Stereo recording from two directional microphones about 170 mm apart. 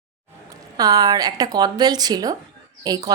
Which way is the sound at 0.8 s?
20° right (ahead or behind).